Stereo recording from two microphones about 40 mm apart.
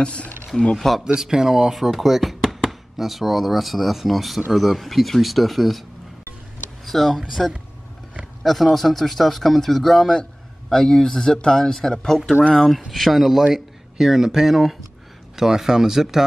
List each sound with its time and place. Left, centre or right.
0.0 s speech: left
0.7 s speech: centre
1.0 s speech: centre
6.9 s speech: centre